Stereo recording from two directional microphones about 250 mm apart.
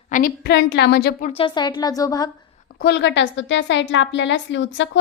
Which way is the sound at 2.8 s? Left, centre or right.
Left.